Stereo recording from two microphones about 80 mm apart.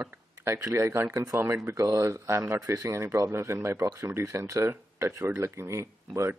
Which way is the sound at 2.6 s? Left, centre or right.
Right.